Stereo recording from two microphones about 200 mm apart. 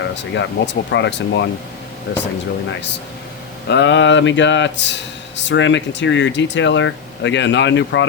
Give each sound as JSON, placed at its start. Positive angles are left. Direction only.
{"t": 0.0, "sound": "speech", "side_deg": 65}
{"t": 3.7, "sound": "speech", "side_deg": 60}